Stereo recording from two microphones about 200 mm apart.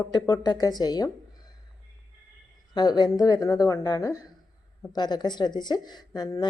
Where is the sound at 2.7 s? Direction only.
20° left (ahead or behind).